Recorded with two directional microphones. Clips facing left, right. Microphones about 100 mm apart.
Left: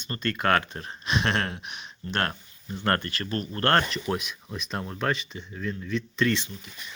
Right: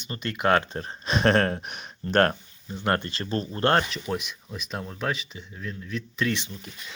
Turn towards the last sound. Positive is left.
turn(degrees=-5)  # may be behind; listen again after turning